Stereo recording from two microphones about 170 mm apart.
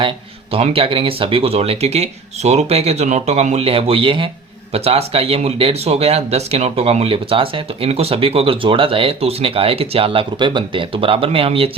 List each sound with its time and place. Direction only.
0.5 s speech: 35° right (ahead or behind)